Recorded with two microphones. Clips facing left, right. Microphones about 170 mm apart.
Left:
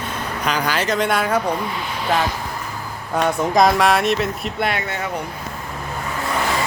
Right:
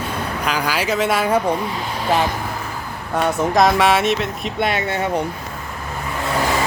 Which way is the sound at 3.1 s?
Centre (ahead or behind).